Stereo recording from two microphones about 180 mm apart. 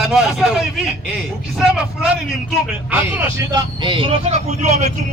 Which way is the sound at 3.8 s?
30° right (ahead or behind).